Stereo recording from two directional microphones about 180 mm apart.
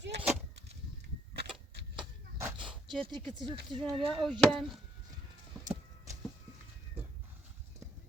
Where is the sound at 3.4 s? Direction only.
25° right (ahead or behind).